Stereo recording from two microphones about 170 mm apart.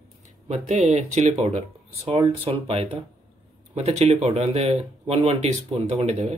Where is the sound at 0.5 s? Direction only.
40° right (ahead or behind).